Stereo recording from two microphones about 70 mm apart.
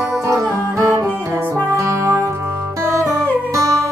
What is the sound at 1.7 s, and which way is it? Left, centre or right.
Music, right.